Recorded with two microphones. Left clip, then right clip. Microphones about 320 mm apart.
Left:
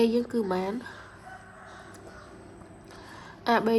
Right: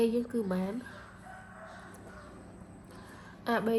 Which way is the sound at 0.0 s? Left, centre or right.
Left.